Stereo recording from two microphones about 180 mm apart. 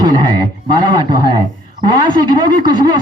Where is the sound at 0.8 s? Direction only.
20° right (ahead or behind).